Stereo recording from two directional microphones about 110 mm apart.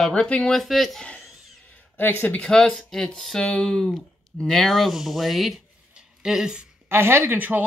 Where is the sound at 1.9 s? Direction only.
20° left (ahead or behind); by 6.7 s 5° right (ahead or behind).